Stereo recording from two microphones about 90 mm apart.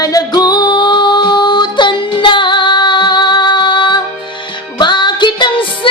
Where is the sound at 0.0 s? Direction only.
45° left (ahead or behind).